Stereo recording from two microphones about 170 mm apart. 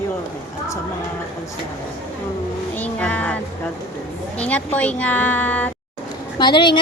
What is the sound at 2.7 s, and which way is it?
Speech, 10° left (ahead or behind).